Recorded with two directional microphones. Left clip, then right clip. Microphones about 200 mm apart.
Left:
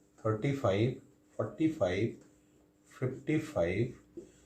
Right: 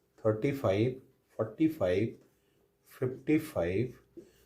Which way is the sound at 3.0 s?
45° right (ahead or behind).